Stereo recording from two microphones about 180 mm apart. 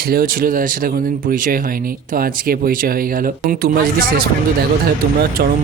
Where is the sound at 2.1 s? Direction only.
55° right (ahead or behind).